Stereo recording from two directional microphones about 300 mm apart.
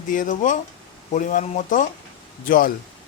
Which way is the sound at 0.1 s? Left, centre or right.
Left.